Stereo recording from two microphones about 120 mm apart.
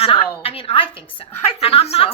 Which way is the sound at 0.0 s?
55° left (ahead or behind).